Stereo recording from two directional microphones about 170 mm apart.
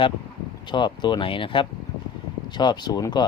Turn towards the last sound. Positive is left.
turn(degrees=25)  # may be behind; listen again after turning